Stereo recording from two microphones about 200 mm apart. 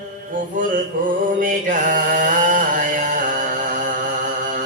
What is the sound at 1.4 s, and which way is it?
Mantra, 45° right (ahead or behind).